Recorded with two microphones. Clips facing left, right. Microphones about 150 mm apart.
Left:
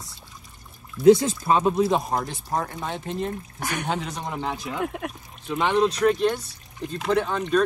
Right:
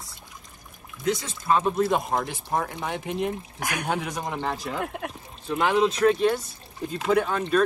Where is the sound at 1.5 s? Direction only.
30° left (ahead or behind).